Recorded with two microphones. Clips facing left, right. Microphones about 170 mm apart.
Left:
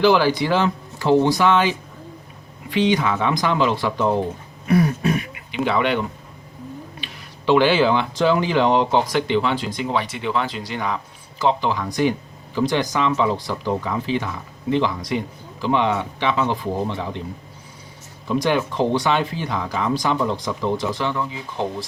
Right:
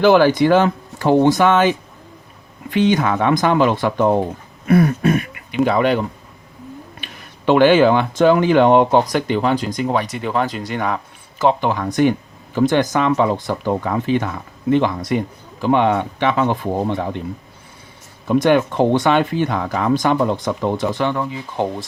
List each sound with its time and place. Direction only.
0.0 s speech: 50° right (ahead or behind)
7.0 s speech: 50° right (ahead or behind)
18.3 s speech: 55° right (ahead or behind)